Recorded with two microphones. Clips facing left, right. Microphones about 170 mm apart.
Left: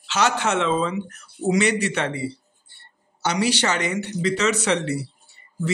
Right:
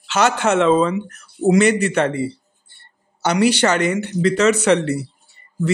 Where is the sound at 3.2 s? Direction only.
55° right (ahead or behind).